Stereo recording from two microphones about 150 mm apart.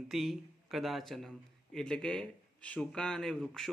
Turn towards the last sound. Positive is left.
turn(degrees=5)  # may be behind; listen again after turning